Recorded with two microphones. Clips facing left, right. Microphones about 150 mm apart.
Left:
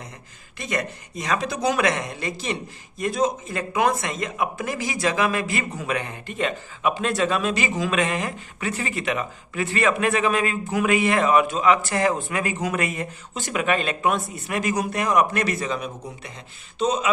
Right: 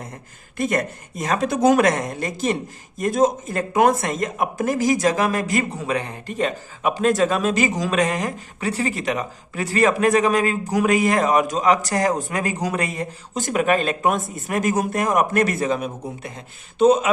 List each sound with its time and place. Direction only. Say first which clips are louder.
0.5 s speech: right 6 dB; 50° right (ahead or behind)